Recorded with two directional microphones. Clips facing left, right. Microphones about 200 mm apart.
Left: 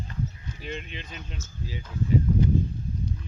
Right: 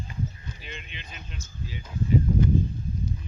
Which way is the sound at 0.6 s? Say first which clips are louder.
Left 7 dB; 45° left (ahead or behind).